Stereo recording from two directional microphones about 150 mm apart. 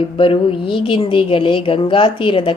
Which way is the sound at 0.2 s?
35° left (ahead or behind).